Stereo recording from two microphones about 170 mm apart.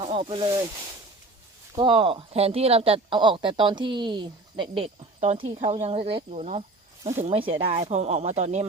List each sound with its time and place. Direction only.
0.0 s speech: 35° right (ahead or behind)
1.7 s speech: 30° right (ahead or behind)